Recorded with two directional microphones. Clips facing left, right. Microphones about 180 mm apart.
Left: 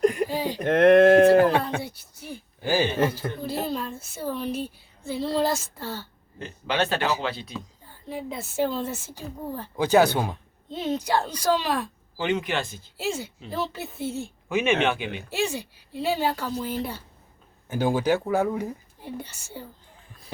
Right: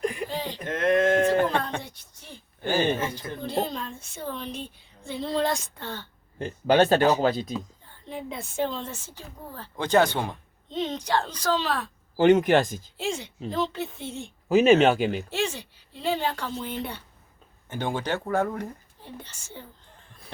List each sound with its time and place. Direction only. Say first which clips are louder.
0.0 s a sound: left 7 dB; 45° left (ahead or behind)
0.3 s a sound: left 4 dB; 10° left (ahead or behind)
0.6 s a sound: left 8 dB; 65° left (ahead or behind)
1.4 s music: left 5 dB; 5° left (ahead or behind)
3.4 s a woman's voice: right 1 dB; 5° left (ahead or behind)
6.4 s speech: right 6 dB; 45° right (ahead or behind)
8.0 s speech: left 2 dB; 5° left (ahead or behind)
12.1 s speech: right 8 dB; 45° right (ahead or behind)
13.0 s speech: left 1 dB; 5° left (ahead or behind)
14.4 s speech: right 6 dB; 40° right (ahead or behind)
15.3 s speech: left 1 dB; 10° left (ahead or behind)
17.7 s speech: left 6 dB; 5° left (ahead or behind)